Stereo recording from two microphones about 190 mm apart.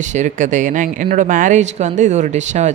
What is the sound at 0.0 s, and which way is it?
Speech, 40° right (ahead or behind).